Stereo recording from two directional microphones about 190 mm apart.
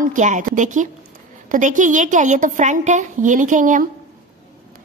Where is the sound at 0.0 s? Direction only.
40° right (ahead or behind).